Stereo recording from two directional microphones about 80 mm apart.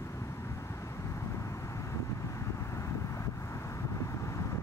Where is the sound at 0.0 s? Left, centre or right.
Left.